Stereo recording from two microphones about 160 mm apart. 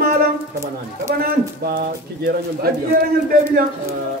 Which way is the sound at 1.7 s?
75° right (ahead or behind).